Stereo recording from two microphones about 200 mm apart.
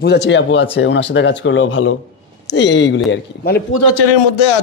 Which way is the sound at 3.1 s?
50° left (ahead or behind).